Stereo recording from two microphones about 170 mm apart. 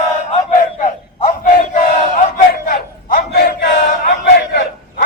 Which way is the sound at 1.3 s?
50° left (ahead or behind).